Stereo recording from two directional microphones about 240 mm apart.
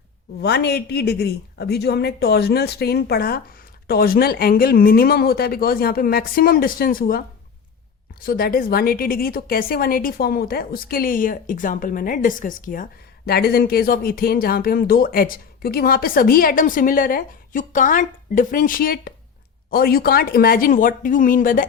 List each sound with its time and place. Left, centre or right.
0.4 s a woman's voice: left